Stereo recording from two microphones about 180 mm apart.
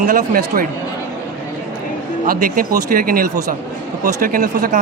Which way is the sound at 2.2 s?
55° right (ahead or behind).